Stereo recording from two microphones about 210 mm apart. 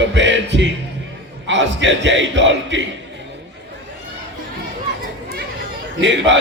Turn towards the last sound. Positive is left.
turn(degrees=-60)  # may be behind; listen again after turning